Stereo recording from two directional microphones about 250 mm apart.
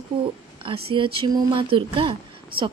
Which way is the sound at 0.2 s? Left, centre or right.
Right.